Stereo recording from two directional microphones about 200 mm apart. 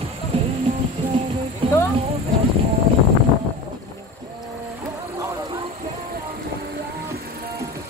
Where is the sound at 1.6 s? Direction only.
25° right (ahead or behind).